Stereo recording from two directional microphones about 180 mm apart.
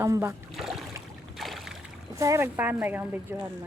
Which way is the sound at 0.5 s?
Centre (ahead or behind).